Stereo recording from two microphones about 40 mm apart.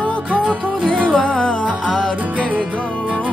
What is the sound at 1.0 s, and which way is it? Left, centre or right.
Music, left.